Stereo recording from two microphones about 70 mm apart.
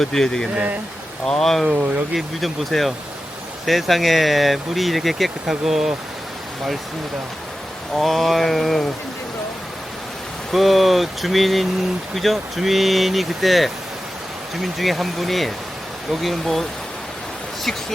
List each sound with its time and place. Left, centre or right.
0.0 s speech: centre
0.5 s speech: centre
1.2 s speech: centre
7.9 s speech: centre
10.5 s speech: centre